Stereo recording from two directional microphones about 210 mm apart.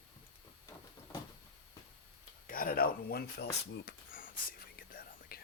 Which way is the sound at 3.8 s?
45° left (ahead or behind).